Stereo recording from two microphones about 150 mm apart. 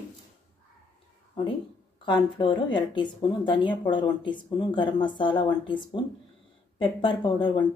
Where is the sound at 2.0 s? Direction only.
30° left (ahead or behind).